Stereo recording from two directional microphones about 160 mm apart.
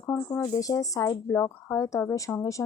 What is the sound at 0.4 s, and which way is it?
Speech, 20° left (ahead or behind).